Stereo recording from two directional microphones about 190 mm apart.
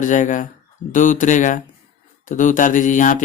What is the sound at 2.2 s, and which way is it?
Mantra, 40° left (ahead or behind).